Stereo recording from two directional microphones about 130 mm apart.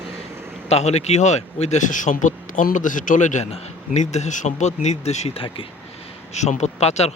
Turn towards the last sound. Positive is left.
turn(degrees=55)  # may be behind; listen again after turning